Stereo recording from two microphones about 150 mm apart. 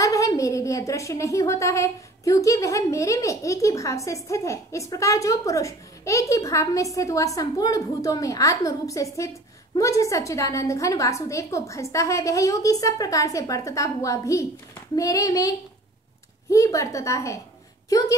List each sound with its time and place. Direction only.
0.0 s speech: 20° left (ahead or behind)